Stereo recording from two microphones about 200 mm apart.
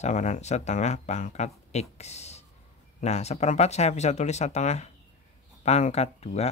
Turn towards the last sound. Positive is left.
turn(degrees=30)  # may be behind; listen again after turning